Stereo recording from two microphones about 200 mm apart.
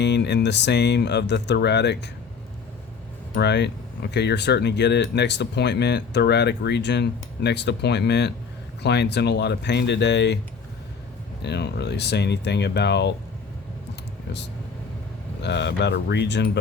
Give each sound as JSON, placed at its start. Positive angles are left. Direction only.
{"t": 0.0, "sound": "speech", "side_deg": 60}
{"t": 3.3, "sound": "speech", "side_deg": 55}
{"t": 11.4, "sound": "speech", "side_deg": 60}
{"t": 15.4, "sound": "speech", "side_deg": 60}